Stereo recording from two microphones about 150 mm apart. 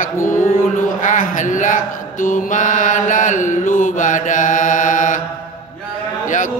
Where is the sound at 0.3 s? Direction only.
60° left (ahead or behind).